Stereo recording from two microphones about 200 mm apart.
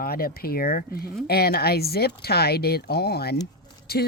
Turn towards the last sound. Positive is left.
turn(degrees=50)  # may be behind; listen again after turning